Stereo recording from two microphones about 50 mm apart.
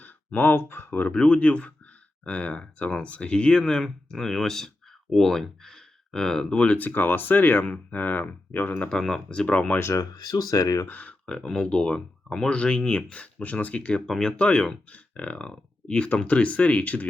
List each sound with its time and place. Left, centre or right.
0.0 s speech: left
1.1 s speech: left
3.8 s speech: centre; by 8.7 s left
8.7 s speech: left
9.0 s speech: centre
9.3 s speech: left
9.7 s speech: left
10.8 s speech: left
11.3 s speech: centre
14.1 s speech: centre
15.1 s speech: left